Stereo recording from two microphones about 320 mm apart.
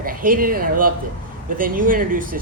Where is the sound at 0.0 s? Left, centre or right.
Right.